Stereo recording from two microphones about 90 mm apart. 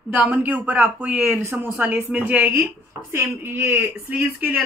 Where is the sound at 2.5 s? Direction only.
30° right (ahead or behind).